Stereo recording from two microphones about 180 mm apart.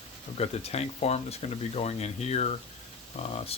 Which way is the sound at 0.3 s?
35° left (ahead or behind).